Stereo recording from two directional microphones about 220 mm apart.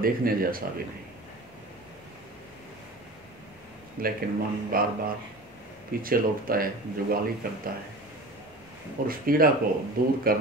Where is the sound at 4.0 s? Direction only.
40° right (ahead or behind).